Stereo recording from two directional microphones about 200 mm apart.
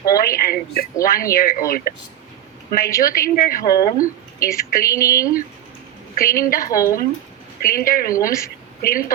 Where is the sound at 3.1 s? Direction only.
45° left (ahead or behind).